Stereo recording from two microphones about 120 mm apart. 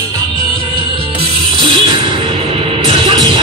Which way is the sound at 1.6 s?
45° right (ahead or behind).